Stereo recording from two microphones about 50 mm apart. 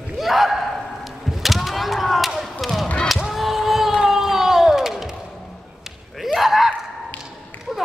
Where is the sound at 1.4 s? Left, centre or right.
Centre.